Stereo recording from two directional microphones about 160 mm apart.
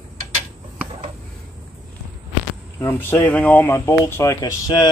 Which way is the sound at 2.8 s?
15° left (ahead or behind).